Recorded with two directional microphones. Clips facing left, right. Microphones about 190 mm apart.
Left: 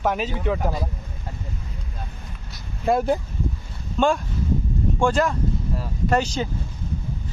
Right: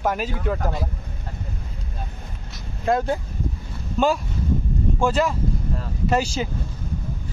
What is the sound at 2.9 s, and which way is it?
Speech, 10° left (ahead or behind).